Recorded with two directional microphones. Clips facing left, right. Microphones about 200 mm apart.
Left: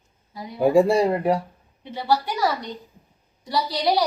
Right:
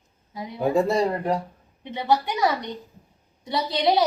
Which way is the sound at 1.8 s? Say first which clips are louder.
Even; 20° right (ahead or behind).